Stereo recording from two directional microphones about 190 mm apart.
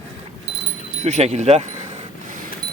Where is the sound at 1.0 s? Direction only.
35° right (ahead or behind).